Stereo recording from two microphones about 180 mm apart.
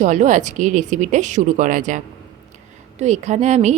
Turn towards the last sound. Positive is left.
turn(degrees=-40)  # may be behind; listen again after turning